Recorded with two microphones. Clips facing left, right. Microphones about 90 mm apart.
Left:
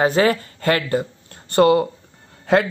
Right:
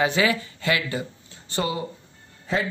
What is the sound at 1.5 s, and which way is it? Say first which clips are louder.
A man's voice: left 13 dB; 60° left (ahead or behind).